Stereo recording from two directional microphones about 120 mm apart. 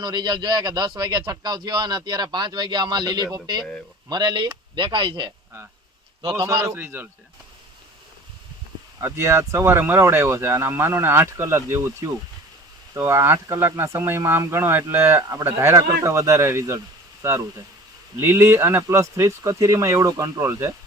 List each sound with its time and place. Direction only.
0.0 s speech: 35° right (ahead or behind)
6.4 s speech: 25° right (ahead or behind)
9.0 s speech: 20° right (ahead or behind)
18.2 s speech: 20° right (ahead or behind)